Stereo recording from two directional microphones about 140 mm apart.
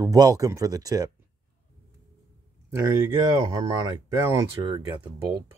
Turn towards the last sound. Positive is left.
turn(degrees=-35)  # may be behind; listen again after turning